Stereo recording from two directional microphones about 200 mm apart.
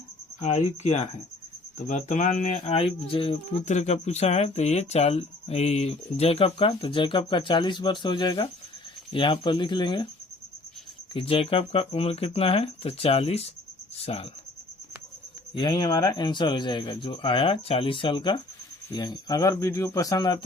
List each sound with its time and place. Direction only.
0.4 s speech: 35° left (ahead or behind)
11.1 s speech: 25° left (ahead or behind)
15.5 s speech: 20° left (ahead or behind)